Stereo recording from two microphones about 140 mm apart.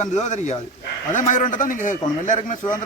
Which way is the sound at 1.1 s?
70° left (ahead or behind).